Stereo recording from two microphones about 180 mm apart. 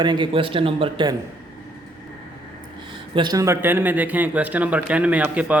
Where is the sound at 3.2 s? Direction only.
20° right (ahead or behind).